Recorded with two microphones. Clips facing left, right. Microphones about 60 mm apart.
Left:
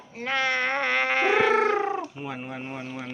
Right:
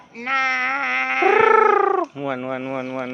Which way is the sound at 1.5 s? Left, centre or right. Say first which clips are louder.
Right 8 dB; right.